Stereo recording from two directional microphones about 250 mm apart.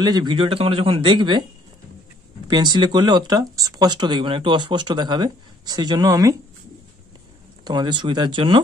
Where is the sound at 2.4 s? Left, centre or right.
Centre.